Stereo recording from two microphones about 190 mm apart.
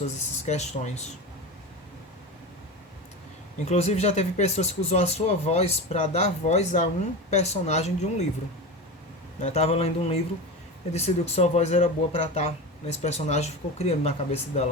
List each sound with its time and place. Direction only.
0.1 s speech: 35° left (ahead or behind)
3.7 s speech: 35° left (ahead or behind)
9.4 s speech: 35° left (ahead or behind)